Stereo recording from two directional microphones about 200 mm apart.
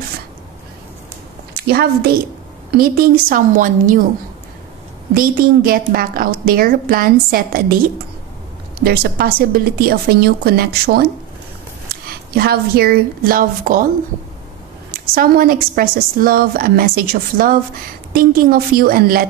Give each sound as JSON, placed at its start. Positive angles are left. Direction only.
{"t": 1.6, "sound": "a woman's voice", "side_deg": -50}
{"t": 5.1, "sound": "a woman's voice", "side_deg": -45}
{"t": 8.7, "sound": "a woman's voice", "side_deg": -50}
{"t": 15.1, "sound": "a woman's voice", "side_deg": -45}